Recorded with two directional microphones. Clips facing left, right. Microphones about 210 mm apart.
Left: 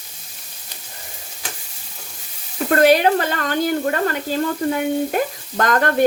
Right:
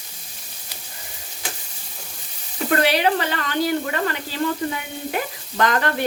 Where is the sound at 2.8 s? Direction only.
45° left (ahead or behind).